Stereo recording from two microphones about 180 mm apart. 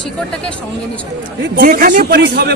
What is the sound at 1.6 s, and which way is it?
Speech, 50° right (ahead or behind).